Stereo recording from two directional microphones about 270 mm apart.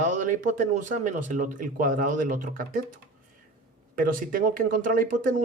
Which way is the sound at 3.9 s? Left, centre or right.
Right.